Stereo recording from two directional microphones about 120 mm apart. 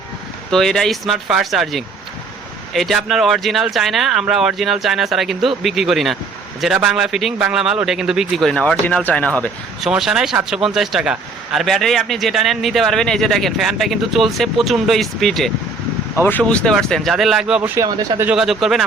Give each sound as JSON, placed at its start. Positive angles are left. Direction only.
{"t": 0.5, "sound": "a man's voice", "side_deg": 5}
{"t": 9.8, "sound": "a man's voice", "side_deg": -5}
{"t": 16.2, "sound": "a man's voice", "side_deg": 15}
{"t": 17.6, "sound": "speech", "side_deg": -30}
{"t": 18.3, "sound": "a man's voice", "side_deg": 0}